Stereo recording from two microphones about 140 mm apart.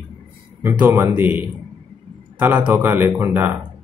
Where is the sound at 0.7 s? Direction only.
10° right (ahead or behind).